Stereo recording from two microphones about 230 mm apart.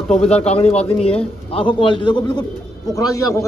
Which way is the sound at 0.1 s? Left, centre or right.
Left.